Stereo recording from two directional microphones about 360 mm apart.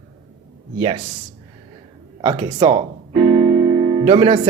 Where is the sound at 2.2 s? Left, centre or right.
Centre.